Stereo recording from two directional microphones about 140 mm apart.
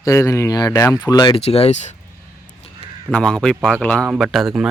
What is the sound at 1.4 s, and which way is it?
Speech, 45° left (ahead or behind).